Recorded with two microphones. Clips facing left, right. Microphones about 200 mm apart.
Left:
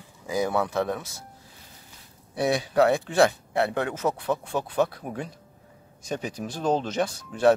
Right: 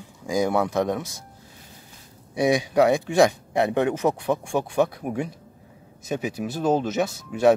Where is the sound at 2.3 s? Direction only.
15° right (ahead or behind).